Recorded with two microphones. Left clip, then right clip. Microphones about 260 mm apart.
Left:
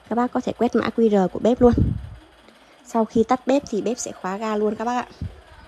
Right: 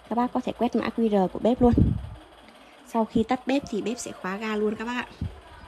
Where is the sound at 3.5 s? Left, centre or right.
Centre.